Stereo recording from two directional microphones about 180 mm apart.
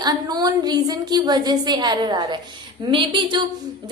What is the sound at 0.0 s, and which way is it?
A woman's voice, 20° right (ahead or behind).